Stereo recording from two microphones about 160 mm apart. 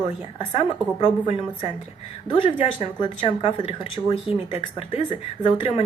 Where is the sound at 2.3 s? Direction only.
35° left (ahead or behind).